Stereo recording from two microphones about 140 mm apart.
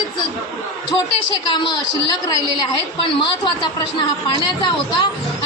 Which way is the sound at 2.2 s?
30° left (ahead or behind).